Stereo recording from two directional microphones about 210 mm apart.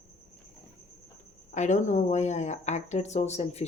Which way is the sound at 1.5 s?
35° left (ahead or behind).